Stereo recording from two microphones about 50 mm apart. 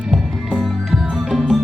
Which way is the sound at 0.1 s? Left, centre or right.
Centre.